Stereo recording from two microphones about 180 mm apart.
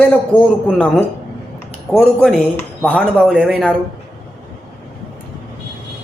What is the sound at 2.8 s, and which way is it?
Speech, 5° left (ahead or behind).